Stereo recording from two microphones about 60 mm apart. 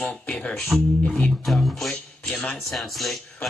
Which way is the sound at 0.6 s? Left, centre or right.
Centre.